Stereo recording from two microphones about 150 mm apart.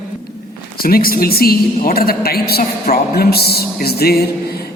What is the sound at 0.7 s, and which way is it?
A woman's voice, 80° left.